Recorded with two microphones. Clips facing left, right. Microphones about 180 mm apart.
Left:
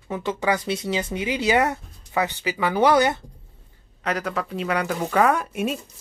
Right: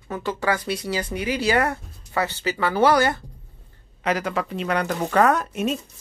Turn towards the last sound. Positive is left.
turn(degrees=10)  # may be behind; listen again after turning